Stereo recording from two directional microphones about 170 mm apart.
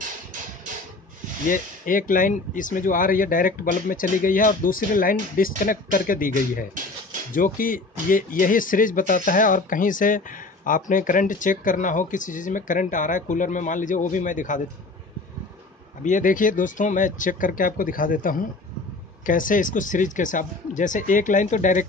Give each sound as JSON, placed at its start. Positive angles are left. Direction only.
{"t": 1.5, "sound": "speech", "side_deg": 55}
{"t": 16.0, "sound": "speech", "side_deg": 50}